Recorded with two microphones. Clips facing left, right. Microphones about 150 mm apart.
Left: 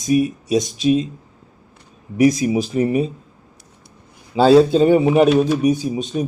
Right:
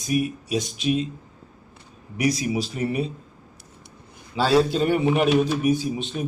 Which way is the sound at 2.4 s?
35° left (ahead or behind).